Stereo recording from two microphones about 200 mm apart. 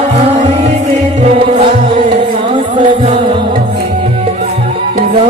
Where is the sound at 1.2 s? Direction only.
30° right (ahead or behind).